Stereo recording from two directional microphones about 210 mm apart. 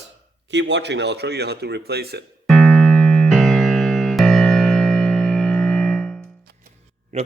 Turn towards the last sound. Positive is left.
turn(degrees=-30)  # may be behind; listen again after turning